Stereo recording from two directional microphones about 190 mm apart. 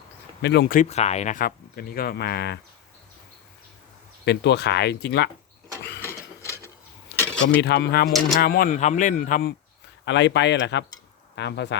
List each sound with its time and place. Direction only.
0.4 s speech: 65° left (ahead or behind)
0.7 s speech: 40° left (ahead or behind); by 2.6 s 55° left (ahead or behind)
4.3 s speech: 65° left (ahead or behind)
6.0 s printer: 15° left (ahead or behind)
7.2 s keys jangling: 5° left (ahead or behind)
7.6 s speech: 60° left (ahead or behind)
10.1 s speech: 70° left (ahead or behind)